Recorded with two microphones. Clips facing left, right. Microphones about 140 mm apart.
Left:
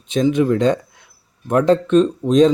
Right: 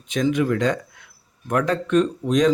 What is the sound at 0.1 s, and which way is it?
Speech, 25° left (ahead or behind).